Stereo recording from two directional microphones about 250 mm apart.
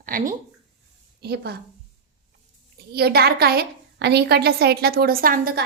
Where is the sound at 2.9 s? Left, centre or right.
Right.